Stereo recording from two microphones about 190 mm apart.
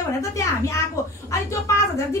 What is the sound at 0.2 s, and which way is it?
A woman's voice, 15° left (ahead or behind).